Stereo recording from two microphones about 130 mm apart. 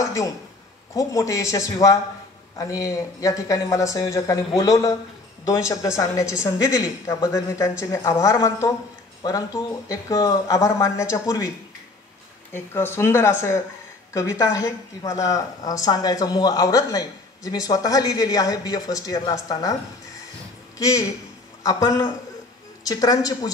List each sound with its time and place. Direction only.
0.0 s a sound: 25° left (ahead or behind)
0.9 s speech: 25° left (ahead or behind)
12.5 s speech: 15° left (ahead or behind)
20.7 s speech: 25° left (ahead or behind)